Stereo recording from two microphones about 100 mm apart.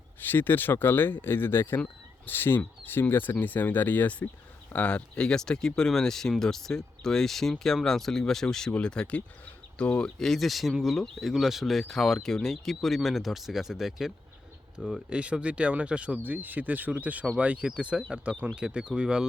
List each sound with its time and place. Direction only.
0.2 s speech: 20° left (ahead or behind); by 15.0 s centre (ahead or behind)
15.1 s speech: 10° right (ahead or behind)